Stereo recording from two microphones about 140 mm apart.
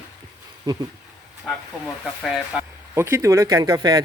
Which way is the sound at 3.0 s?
20° right (ahead or behind).